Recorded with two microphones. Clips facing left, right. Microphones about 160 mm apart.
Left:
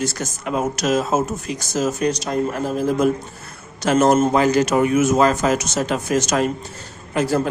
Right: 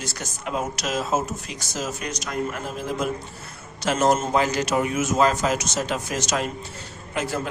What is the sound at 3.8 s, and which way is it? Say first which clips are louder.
A man's voice: left 6 dB; 55° left (ahead or behind).